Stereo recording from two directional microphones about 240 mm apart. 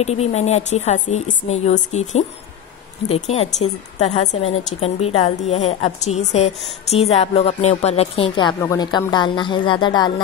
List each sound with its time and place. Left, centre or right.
0.0 s a woman's voice: left